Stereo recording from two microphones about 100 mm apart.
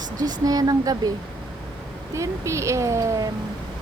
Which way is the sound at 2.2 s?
30° right (ahead or behind).